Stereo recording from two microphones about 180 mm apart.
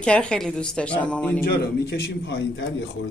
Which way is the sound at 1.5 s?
65° left (ahead or behind).